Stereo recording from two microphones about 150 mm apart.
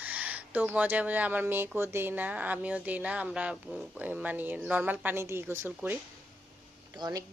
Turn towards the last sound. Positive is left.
turn(degrees=-25)  # may be behind; listen again after turning